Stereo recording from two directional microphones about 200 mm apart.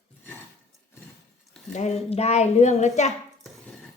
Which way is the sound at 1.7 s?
35° left (ahead or behind).